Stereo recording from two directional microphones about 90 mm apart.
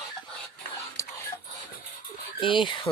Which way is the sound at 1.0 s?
35° left (ahead or behind).